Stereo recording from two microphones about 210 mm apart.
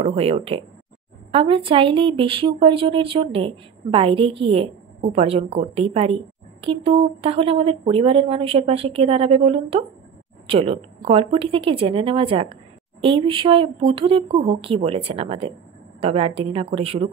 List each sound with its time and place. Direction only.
0.0 s speech: 30° right (ahead or behind)